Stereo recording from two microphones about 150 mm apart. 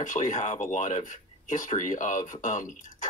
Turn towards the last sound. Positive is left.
turn(degrees=60)  # may be behind; listen again after turning